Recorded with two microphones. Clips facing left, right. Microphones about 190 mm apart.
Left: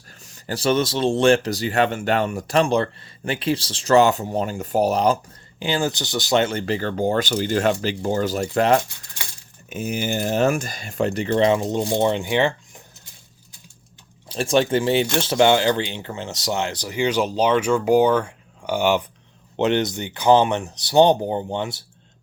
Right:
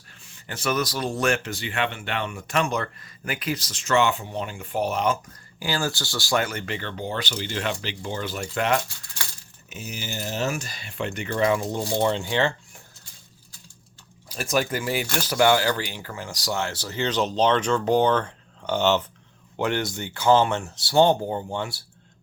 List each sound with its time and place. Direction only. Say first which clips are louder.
0.2 s speech: left 8 dB; 40° left (ahead or behind)
5.5 s speech: left 4 dB; 20° left (ahead or behind); by 8.8 s 35° left (ahead or behind)
9.6 s speech: left 10 dB; 50° left (ahead or behind); by 12.8 s 15° left (ahead or behind)
14.3 s speech: left 6 dB; 30° left (ahead or behind)